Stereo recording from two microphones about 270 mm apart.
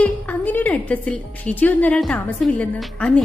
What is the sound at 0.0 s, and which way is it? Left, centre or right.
A woman's voice, centre.